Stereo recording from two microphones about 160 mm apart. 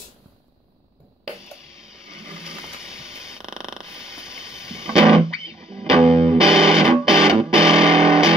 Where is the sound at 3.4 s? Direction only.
5° right (ahead or behind).